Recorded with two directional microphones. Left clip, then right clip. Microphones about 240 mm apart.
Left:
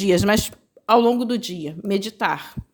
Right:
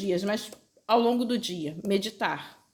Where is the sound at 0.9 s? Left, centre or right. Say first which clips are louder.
Left 7 dB; left.